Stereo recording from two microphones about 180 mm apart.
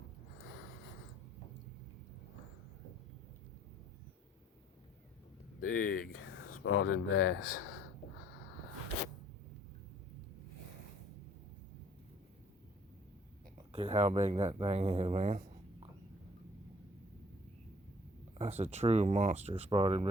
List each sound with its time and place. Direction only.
5.5 s speech: 50° left (ahead or behind)
6.6 s speech: 90° left
13.7 s speech: 35° right (ahead or behind)
18.3 s speech: 40° right (ahead or behind)